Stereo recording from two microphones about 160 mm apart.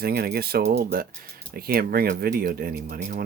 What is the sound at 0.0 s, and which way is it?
Speech, 80° right.